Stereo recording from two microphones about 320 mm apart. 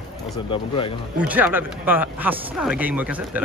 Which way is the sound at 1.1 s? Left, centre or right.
Centre.